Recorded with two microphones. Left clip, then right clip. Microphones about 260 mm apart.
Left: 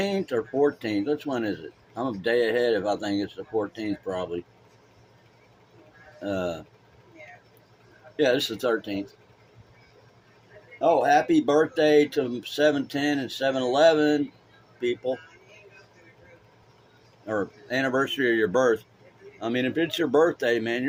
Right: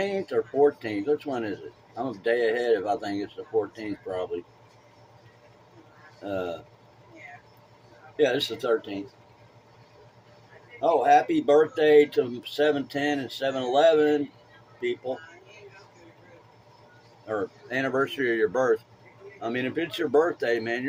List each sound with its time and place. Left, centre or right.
0.0 s speech: left
6.2 s speech: left
8.1 s speech: left
10.8 s speech: left
17.2 s speech: left